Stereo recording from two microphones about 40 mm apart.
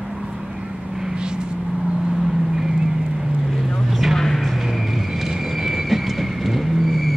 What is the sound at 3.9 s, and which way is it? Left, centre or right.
Vehicle, centre.